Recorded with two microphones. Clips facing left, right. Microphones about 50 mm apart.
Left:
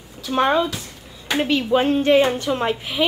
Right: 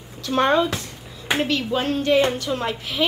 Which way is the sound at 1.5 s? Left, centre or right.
Centre.